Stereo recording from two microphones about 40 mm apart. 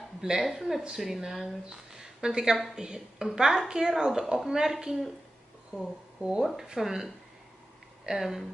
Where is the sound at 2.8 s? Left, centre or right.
Centre.